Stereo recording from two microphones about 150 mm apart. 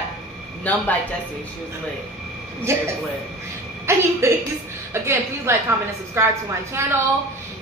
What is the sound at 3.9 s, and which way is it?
A woman's voice, 20° right (ahead or behind).